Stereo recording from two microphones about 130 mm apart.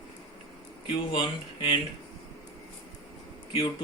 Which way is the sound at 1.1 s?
40° left (ahead or behind).